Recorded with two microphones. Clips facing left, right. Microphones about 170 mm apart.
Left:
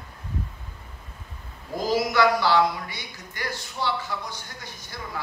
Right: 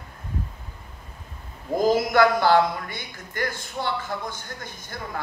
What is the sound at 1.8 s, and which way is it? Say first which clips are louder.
A man's voice: right 2 dB; 50° right (ahead or behind).